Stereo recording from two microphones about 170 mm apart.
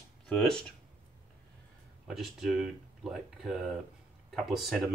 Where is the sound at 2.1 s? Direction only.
Centre (ahead or behind).